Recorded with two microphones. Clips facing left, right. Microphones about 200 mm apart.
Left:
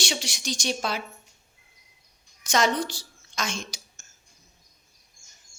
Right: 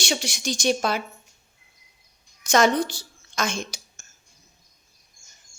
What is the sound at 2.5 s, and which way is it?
A woman's voice, 50° right (ahead or behind).